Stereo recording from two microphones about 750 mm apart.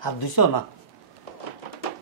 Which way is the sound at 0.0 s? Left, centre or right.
Left.